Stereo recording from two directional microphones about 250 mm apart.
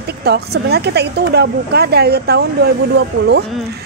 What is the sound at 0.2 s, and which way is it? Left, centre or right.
Speech, right.